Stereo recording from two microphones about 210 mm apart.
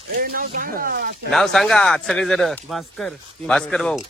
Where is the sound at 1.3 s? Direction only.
Centre (ahead or behind).